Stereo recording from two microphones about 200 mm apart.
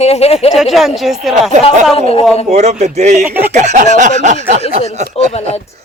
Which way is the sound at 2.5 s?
35° right (ahead or behind).